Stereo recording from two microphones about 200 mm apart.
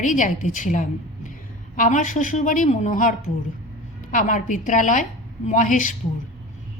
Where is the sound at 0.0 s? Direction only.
40° left (ahead or behind).